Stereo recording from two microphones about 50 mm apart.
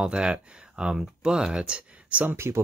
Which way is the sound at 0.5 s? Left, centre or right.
Centre.